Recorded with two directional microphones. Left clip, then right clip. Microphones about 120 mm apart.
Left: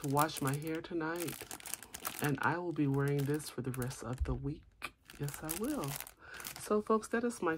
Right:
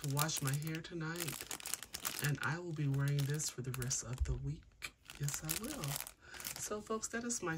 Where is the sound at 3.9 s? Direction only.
35° left (ahead or behind).